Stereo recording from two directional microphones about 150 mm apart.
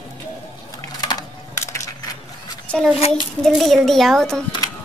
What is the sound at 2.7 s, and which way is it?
A woman's voice, 5° left (ahead or behind).